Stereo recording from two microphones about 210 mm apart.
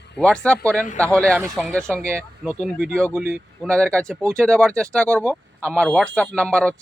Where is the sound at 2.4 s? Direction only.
5° right (ahead or behind).